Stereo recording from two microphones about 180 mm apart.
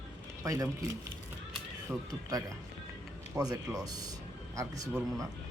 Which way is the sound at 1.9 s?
10° right (ahead or behind).